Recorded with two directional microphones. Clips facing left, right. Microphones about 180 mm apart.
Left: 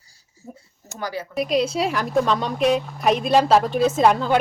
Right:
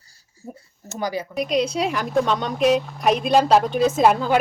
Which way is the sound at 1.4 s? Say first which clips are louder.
Left 1 dB; centre (ahead or behind).